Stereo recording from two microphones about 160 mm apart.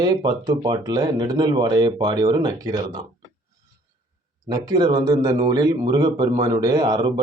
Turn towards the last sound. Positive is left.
turn(degrees=-25)  # may be behind; listen again after turning